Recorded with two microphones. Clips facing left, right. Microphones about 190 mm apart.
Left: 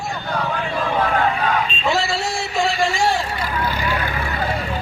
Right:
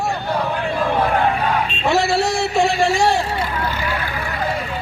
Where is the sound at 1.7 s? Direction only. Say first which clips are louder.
Right 3 dB; 60° right (ahead or behind).